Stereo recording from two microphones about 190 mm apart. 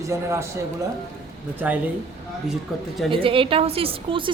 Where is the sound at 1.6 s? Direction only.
5° right (ahead or behind).